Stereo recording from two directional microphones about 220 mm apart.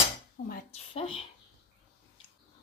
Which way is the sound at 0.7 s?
25° left (ahead or behind).